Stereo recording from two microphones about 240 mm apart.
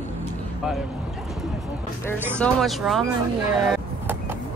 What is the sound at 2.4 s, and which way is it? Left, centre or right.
Speech, centre.